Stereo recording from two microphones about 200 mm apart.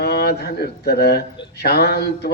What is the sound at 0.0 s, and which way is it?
Speech, 50° left (ahead or behind).